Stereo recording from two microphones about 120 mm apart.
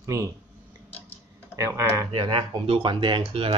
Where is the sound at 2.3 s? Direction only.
45° right (ahead or behind).